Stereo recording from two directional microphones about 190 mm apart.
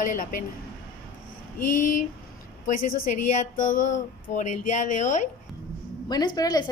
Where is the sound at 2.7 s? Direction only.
40° left (ahead or behind).